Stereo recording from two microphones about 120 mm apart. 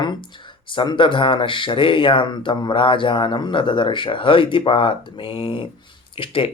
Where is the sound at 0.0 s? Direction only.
40° left (ahead or behind).